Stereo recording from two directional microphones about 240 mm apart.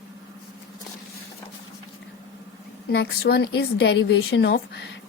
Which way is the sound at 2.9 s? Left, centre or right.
Left.